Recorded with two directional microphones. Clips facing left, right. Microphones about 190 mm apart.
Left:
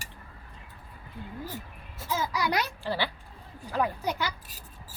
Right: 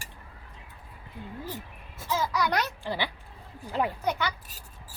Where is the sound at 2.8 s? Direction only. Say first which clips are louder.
Left 1 dB; 15° right (ahead or behind).